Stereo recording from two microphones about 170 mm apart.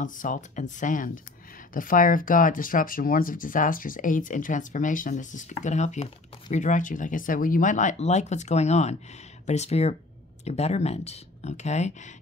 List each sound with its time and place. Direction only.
0.0 s speech: 50° left (ahead or behind)